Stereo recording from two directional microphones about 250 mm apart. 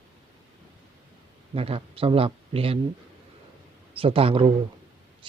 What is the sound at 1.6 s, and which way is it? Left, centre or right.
Speech, right.